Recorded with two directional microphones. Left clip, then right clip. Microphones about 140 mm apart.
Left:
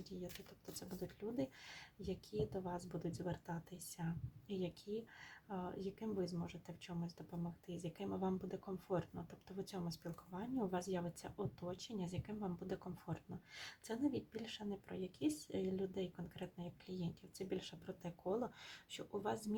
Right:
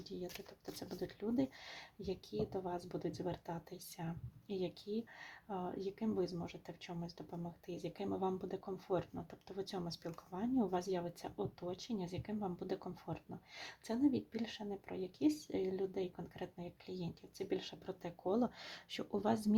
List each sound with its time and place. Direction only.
0.0 s speech: 30° right (ahead or behind)
5.2 s speech: 30° right (ahead or behind)